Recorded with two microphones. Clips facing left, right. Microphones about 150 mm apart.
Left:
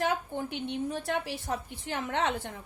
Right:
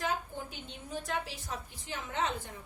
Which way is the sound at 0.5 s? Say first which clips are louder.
Left 9 dB; 65° left (ahead or behind).